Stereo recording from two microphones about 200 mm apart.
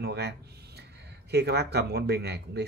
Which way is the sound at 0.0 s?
55° right (ahead or behind).